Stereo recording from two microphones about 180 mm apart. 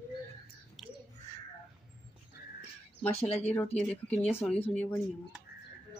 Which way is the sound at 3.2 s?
35° left (ahead or behind).